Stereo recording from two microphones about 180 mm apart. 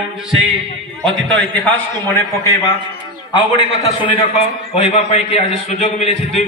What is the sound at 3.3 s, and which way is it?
Speech, 25° left (ahead or behind).